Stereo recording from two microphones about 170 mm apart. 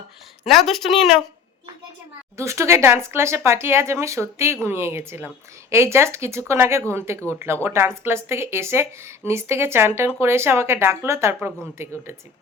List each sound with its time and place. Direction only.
0.4 s a woman's voice: centre (ahead or behind)
2.4 s speech: 15° right (ahead or behind)